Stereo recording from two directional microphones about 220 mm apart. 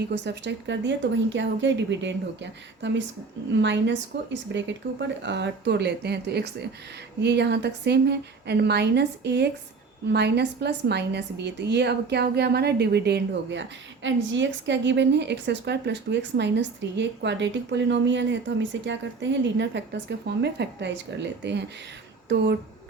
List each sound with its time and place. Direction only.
0.1 s a woman's voice: 50° right (ahead or behind)